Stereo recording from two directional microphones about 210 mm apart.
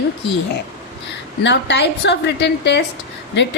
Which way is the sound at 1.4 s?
55° left (ahead or behind).